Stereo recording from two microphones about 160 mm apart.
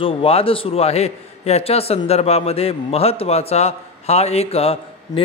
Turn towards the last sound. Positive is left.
turn(degrees=40)  # may be behind; listen again after turning